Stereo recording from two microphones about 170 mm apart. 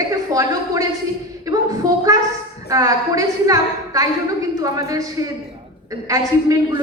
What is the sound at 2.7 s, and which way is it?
A woman's voice, 20° right (ahead or behind).